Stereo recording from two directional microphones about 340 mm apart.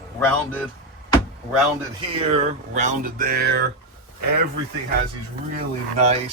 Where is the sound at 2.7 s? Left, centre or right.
Right.